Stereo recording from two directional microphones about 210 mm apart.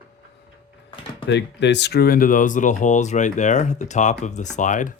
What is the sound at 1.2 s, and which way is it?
Speech, 55° left (ahead or behind).